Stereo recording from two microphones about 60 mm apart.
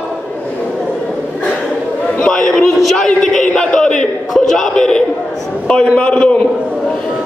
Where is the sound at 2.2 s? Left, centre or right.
Centre.